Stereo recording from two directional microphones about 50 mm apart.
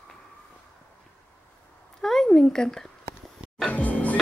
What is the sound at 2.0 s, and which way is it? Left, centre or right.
Speech, centre.